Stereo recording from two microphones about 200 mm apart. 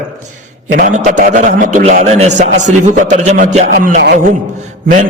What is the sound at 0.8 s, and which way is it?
A man's voice, 40° right (ahead or behind).